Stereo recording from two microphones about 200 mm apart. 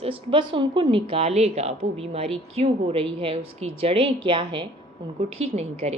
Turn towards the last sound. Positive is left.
turn(degrees=-35)  # may be behind; listen again after turning